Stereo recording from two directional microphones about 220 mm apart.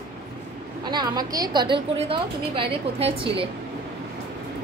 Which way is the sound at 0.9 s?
20° right (ahead or behind).